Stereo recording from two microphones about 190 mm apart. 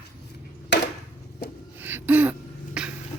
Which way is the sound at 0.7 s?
65° left (ahead or behind).